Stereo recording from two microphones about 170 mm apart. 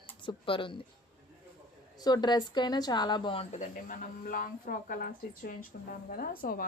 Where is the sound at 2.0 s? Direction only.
25° left (ahead or behind).